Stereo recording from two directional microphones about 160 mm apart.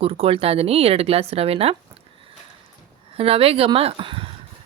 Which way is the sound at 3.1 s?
35° right (ahead or behind).